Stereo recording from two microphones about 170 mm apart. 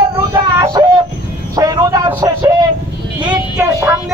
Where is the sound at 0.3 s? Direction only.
20° right (ahead or behind).